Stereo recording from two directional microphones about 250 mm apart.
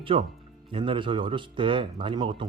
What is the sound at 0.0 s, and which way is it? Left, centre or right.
Speech, right.